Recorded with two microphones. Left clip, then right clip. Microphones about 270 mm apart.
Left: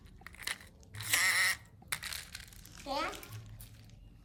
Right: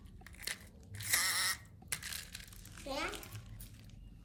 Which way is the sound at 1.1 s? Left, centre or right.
Left.